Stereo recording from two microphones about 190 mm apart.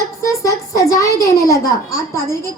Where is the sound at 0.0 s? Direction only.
15° left (ahead or behind).